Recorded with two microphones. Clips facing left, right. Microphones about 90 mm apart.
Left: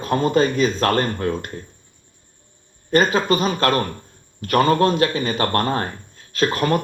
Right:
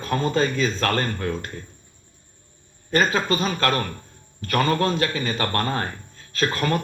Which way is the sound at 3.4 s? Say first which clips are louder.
Left 4 dB; 30° left (ahead or behind).